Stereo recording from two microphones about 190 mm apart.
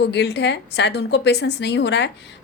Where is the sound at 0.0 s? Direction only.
60° left (ahead or behind).